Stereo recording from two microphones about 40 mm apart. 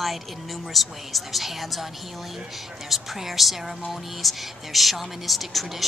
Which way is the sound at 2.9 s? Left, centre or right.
Centre.